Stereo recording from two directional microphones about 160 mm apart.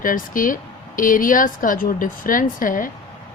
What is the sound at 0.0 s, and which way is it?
A woman's voice, 60° left (ahead or behind).